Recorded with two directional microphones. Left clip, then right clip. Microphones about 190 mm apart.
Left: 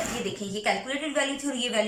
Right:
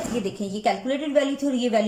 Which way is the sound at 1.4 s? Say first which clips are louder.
Right 6 dB; 40° right (ahead or behind).